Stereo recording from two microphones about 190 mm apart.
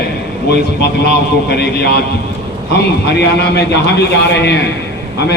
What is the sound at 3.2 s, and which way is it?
A man's voice, 60° left (ahead or behind).